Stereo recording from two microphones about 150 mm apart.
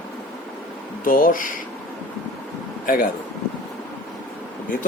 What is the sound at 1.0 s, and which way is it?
Speech, 70° left (ahead or behind).